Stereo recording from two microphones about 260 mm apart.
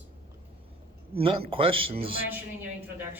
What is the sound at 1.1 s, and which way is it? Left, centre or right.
Speech, right.